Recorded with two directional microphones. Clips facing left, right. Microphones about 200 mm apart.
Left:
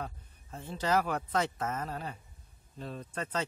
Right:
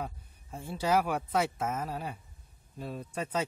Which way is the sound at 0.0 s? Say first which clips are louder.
Right 2 dB; 10° right (ahead or behind).